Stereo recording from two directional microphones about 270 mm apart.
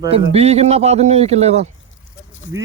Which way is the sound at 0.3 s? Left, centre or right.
Right.